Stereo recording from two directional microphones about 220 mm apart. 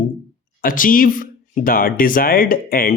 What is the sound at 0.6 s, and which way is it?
Speech, 40° left (ahead or behind).